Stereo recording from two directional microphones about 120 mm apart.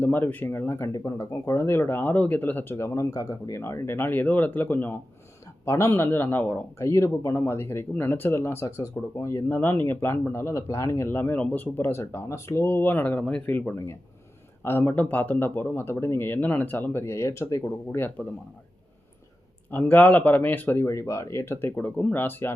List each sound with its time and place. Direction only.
0.0 s speech: 15° left (ahead or behind)
19.7 s speech: 15° left (ahead or behind)